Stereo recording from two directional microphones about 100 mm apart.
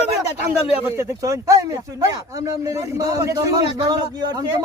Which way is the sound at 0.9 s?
30° right (ahead or behind).